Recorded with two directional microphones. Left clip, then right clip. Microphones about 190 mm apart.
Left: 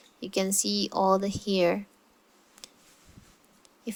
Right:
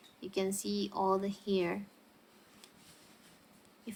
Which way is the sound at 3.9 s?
35° left (ahead or behind).